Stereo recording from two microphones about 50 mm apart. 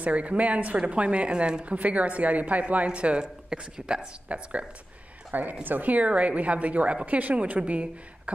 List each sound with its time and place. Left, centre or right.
0.0 s a woman's voice: right
5.3 s a woman's voice: right